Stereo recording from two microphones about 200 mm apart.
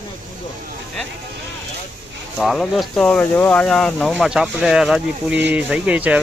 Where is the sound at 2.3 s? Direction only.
Centre (ahead or behind).